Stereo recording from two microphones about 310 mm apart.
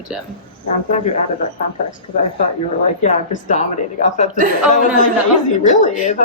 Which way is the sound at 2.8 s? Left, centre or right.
Left.